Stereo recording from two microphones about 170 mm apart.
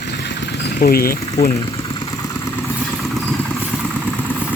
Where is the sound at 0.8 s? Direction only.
60° left (ahead or behind).